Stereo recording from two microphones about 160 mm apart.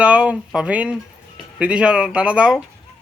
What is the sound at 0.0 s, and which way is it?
Speech, 5° right (ahead or behind).